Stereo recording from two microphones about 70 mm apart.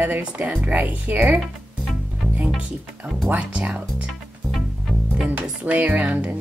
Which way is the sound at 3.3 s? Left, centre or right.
Centre.